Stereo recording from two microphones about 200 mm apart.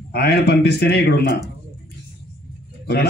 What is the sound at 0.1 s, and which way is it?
A man's voice, 55° left (ahead or behind).